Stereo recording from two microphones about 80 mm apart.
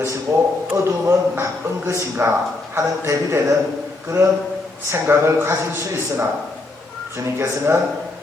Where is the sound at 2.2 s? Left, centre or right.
Right.